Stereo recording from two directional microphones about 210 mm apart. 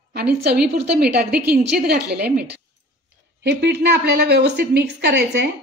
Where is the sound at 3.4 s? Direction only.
55° right (ahead or behind).